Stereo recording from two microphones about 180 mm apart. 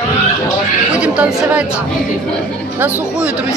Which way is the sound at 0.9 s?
5° right (ahead or behind).